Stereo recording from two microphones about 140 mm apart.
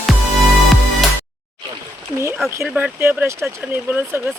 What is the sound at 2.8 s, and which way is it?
Speech, 15° right (ahead or behind).